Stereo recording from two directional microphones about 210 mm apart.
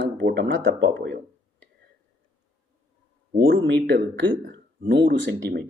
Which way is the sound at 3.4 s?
65° right (ahead or behind).